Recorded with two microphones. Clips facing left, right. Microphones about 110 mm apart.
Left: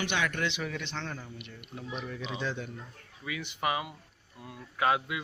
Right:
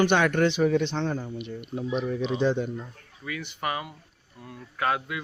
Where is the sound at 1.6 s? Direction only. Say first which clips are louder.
Right 10 dB; 45° right (ahead or behind).